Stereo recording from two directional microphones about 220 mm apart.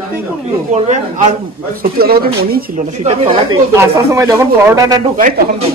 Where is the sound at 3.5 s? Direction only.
15° right (ahead or behind).